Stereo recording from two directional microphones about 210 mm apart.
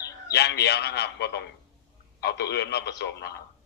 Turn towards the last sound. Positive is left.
turn(degrees=55)  # may be behind; listen again after turning